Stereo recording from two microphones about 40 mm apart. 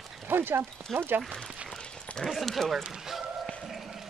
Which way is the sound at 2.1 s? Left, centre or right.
Centre.